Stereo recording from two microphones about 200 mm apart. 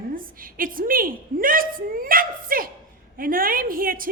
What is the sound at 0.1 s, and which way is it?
A woman's voice, 45° right (ahead or behind).